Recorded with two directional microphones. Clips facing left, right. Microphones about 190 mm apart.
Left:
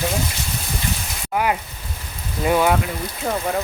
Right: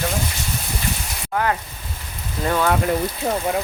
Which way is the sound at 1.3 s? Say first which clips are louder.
Left 1 dB; 15° left (ahead or behind).